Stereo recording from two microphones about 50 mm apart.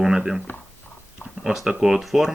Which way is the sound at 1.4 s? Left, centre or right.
Centre.